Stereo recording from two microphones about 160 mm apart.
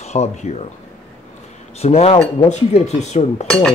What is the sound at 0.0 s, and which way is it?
Speech, 45° left (ahead or behind).